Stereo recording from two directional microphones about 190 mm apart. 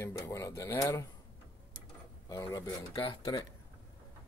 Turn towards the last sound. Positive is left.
turn(degrees=25)  # may be behind; listen again after turning